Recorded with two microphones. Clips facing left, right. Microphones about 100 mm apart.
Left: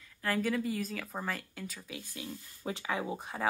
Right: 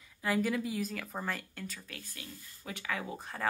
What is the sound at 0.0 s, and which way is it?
Speech, 10° right (ahead or behind).